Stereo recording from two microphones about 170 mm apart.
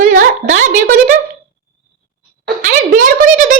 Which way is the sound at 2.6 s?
55° right (ahead or behind).